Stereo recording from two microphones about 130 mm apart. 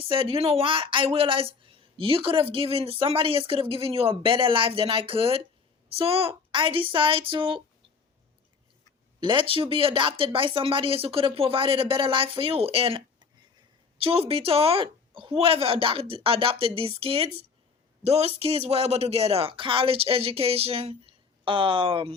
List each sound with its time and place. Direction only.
0.0 s a woman's voice: 45° right (ahead or behind)
9.2 s a woman's voice: 40° right (ahead or behind)